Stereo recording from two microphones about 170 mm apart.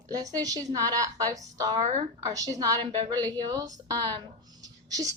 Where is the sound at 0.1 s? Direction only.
20° right (ahead or behind).